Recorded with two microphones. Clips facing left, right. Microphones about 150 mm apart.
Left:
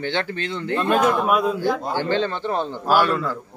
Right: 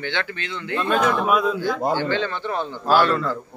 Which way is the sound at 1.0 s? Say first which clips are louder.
Left 1 dB; 5° left (ahead or behind).